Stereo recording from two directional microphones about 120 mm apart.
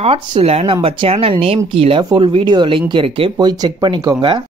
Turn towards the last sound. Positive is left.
turn(degrees=-40)  # may be behind; listen again after turning